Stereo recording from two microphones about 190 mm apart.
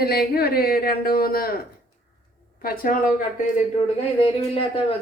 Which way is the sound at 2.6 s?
50° left (ahead or behind).